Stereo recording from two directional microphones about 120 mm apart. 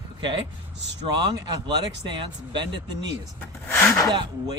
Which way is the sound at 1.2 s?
40° right (ahead or behind).